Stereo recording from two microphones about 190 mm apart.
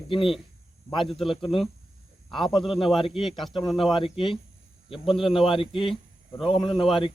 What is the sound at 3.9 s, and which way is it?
Speech, 25° left (ahead or behind).